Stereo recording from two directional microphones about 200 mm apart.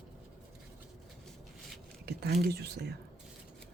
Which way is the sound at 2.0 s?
55° right (ahead or behind).